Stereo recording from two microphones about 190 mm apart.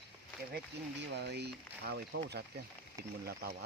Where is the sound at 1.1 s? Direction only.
60° right (ahead or behind).